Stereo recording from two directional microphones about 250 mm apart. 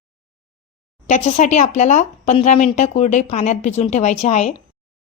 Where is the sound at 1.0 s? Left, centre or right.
Left.